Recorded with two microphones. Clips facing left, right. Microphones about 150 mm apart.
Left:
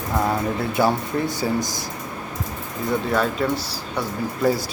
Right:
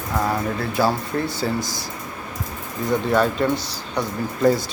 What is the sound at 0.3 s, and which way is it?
Speech, 20° left (ahead or behind).